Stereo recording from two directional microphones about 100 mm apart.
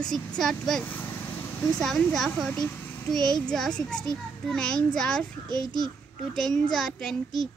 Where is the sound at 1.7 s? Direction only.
5° left (ahead or behind).